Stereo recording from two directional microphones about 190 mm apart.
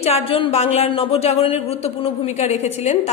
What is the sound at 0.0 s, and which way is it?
A woman's voice, 30° left (ahead or behind).